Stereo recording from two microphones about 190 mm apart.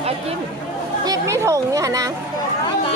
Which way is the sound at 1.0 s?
15° right (ahead or behind).